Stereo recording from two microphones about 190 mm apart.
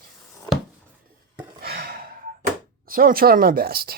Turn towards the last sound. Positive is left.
turn(degrees=-50)  # may be behind; listen again after turning